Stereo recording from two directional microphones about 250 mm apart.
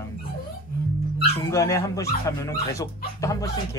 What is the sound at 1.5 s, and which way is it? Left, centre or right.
Speech, centre.